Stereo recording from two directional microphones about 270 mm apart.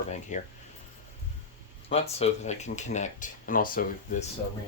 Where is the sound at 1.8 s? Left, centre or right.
Left.